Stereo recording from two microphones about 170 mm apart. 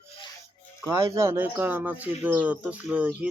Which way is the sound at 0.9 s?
15° right (ahead or behind).